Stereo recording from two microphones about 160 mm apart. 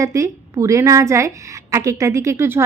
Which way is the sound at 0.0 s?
20° right (ahead or behind).